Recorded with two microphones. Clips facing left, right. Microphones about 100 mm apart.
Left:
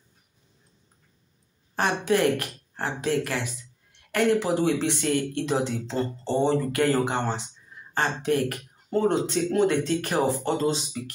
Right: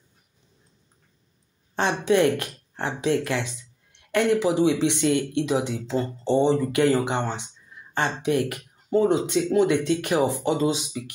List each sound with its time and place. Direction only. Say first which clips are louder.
1.8 s a woman's voice: right 2 dB; 20° right (ahead or behind)
9.7 s speech: right 2 dB; 45° left (ahead or behind)
10.1 s speech: right 2 dB; 15° right (ahead or behind)